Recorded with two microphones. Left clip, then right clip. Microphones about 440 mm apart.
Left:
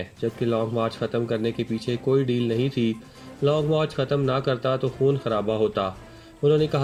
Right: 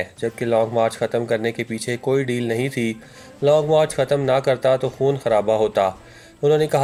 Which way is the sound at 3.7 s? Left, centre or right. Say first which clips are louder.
Right 7 dB; centre.